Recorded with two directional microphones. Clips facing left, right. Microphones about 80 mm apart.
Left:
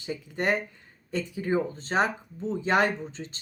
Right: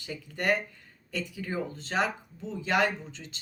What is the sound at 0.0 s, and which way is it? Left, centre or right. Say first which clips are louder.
Speech: left 3 dB; left.